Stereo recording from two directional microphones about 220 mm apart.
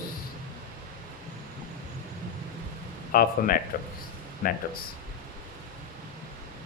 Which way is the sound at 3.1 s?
40° left (ahead or behind).